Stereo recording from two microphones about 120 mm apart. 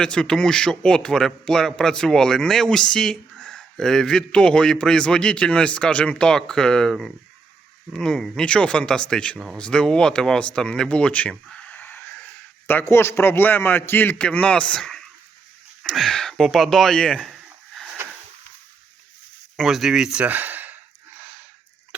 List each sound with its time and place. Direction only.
0.0 s a man's voice: 5° left (ahead or behind)
19.5 s speech: centre (ahead or behind)
21.2 s a sound: 15° right (ahead or behind)